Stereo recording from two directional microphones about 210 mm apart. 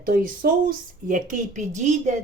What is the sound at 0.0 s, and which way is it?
Speech, 45° right (ahead or behind).